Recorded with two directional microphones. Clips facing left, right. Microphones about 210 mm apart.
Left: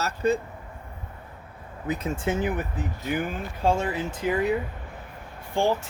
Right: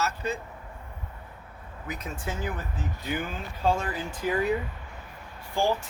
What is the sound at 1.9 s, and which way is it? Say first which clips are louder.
Speech: left 8 dB; 20° left (ahead or behind).